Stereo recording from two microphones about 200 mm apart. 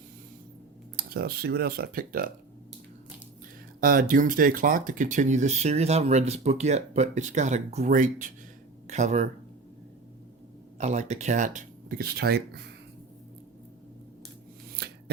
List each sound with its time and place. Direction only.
0.9 s speech: 50° right (ahead or behind)
3.8 s speech: 45° right (ahead or behind)
10.8 s speech: 35° right (ahead or behind); by 12.6 s 55° right (ahead or behind)
14.8 s scissors: 55° right (ahead or behind)